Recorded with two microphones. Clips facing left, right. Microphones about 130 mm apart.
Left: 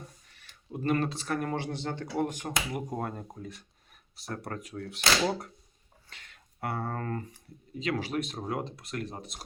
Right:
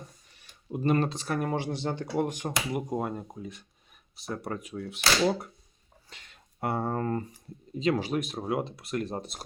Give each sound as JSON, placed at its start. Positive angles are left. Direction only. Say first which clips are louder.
{"t": 0.3, "sound": "a sound", "louder": "right 4 dB", "side_deg": -20}
{"t": 1.2, "sound": "speech", "louder": "right 2 dB", "side_deg": -15}
{"t": 6.1, "sound": "speech", "louder": "right 1 dB", "side_deg": -20}